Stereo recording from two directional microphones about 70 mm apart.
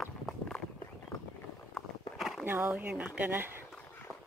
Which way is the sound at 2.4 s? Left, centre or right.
Right.